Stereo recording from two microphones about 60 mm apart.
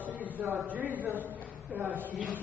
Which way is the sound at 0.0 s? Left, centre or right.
Right.